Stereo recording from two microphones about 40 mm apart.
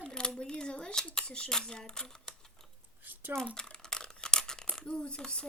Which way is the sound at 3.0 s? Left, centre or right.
Right.